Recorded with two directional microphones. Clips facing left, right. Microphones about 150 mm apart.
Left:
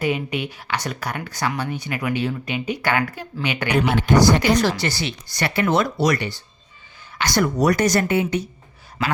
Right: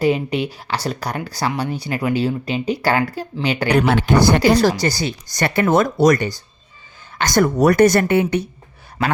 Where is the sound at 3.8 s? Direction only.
75° right (ahead or behind).